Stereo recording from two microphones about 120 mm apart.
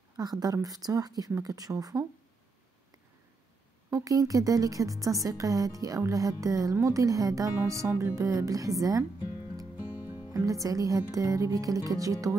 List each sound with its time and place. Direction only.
0.2 s a woman's voice: 35° right (ahead or behind)
3.9 s a woman's voice: 30° right (ahead or behind)
10.3 s a woman's voice: 30° right (ahead or behind)